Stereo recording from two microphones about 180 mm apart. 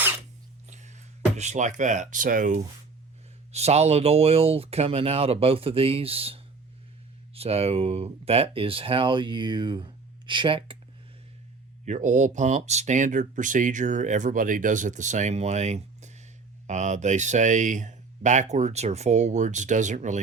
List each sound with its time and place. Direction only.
0.7 s speech: 40° right (ahead or behind)
11.9 s speech: 45° right (ahead or behind)